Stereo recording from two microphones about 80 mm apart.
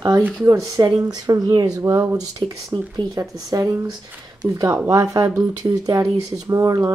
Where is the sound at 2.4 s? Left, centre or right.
Right.